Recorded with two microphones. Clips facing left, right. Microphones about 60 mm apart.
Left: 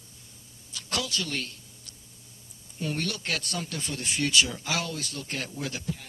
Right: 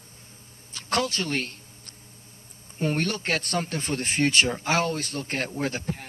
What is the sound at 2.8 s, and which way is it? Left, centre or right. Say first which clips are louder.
Speech: right 5 dB; right.